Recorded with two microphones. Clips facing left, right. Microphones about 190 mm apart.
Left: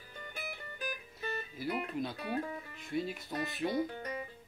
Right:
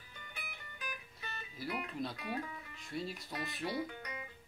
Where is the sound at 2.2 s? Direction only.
55° left (ahead or behind).